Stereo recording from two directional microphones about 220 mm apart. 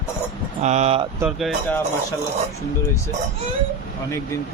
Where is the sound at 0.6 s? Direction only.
30° right (ahead or behind).